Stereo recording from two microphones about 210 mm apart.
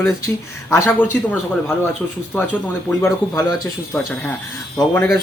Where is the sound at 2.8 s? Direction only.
15° left (ahead or behind).